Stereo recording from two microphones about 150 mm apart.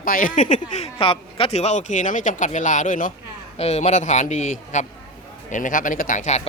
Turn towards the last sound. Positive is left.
turn(degrees=50)  # may be behind; listen again after turning